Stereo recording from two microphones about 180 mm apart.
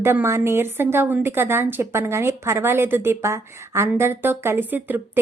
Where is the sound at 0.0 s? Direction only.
15° right (ahead or behind).